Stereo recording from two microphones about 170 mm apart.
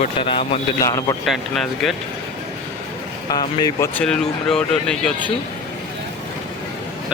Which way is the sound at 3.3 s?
25° left (ahead or behind).